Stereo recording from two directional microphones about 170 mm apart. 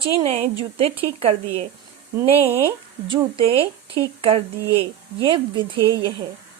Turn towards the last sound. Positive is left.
turn(degrees=-30)  # may be behind; listen again after turning